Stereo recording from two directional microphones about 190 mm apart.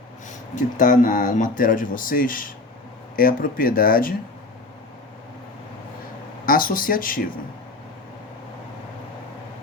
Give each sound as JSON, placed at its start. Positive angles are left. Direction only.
{"t": 0.5, "sound": "speech", "side_deg": 45}
{"t": 6.4, "sound": "speech", "side_deg": 45}